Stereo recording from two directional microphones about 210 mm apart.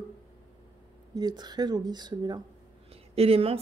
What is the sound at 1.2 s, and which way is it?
A woman's voice, 20° right (ahead or behind).